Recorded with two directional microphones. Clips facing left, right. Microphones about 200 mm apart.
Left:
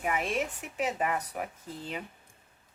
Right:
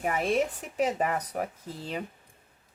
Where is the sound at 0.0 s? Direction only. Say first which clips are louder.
Right 4 dB; 35° right (ahead or behind).